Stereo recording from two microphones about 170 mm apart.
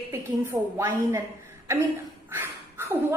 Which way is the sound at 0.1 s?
15° right (ahead or behind).